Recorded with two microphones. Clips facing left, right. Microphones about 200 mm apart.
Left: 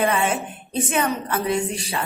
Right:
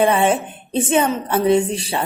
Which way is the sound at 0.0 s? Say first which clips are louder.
Right 5 dB; 30° right (ahead or behind).